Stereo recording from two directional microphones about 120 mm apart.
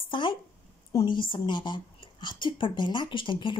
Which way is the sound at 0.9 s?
45° left (ahead or behind).